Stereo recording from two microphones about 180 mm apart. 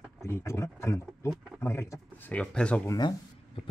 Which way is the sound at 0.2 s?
15° left (ahead or behind).